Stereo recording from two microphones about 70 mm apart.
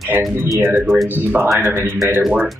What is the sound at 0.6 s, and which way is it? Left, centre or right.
Speech, right.